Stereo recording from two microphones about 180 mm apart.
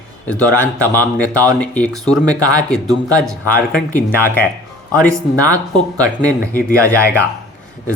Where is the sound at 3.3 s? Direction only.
5° left (ahead or behind).